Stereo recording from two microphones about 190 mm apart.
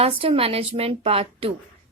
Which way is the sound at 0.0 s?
30° right (ahead or behind).